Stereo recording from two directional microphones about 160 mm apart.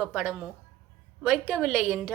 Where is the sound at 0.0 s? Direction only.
5° right (ahead or behind).